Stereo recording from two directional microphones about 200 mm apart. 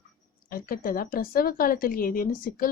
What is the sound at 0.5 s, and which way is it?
A woman's voice, 45° left (ahead or behind).